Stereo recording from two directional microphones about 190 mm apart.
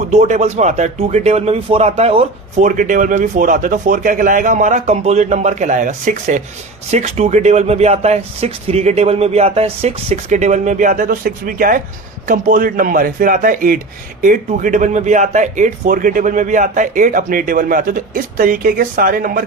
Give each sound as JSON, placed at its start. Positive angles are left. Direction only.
{"t": 0.1, "sound": "speech", "side_deg": -35}